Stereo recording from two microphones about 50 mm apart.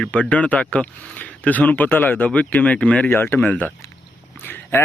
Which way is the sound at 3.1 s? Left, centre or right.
Left.